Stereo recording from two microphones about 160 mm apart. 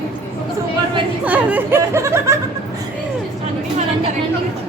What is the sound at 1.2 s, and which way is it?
Speech, 10° right (ahead or behind).